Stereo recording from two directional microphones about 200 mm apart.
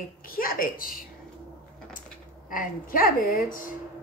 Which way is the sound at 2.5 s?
45° left (ahead or behind).